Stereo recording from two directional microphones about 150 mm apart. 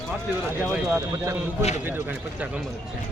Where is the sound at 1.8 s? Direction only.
10° right (ahead or behind).